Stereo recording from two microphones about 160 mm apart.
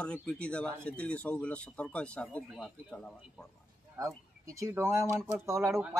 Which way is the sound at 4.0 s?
20° right (ahead or behind).